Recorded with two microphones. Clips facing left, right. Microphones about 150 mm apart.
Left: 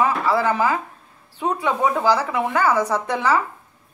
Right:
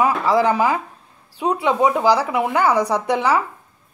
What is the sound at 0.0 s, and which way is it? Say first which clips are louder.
Speech: right 3 dB; 15° right (ahead or behind).